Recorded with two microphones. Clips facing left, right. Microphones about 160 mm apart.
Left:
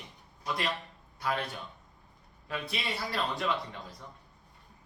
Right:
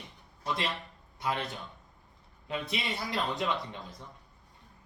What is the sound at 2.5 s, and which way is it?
A man's voice, 20° right (ahead or behind).